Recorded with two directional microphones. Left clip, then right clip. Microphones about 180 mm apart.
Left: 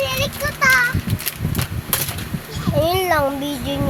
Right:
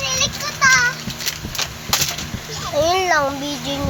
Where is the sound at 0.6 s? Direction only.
50° left (ahead or behind).